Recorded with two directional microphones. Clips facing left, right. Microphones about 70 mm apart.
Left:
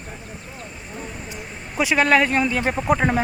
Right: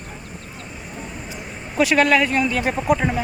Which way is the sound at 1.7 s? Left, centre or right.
Centre.